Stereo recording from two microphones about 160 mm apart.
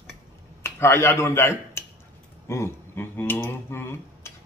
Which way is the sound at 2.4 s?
15° left (ahead or behind).